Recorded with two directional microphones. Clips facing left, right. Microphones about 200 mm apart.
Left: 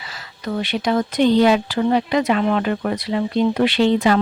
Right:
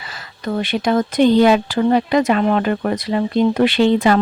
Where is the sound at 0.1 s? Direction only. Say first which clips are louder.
Right 3 dB; 50° right (ahead or behind).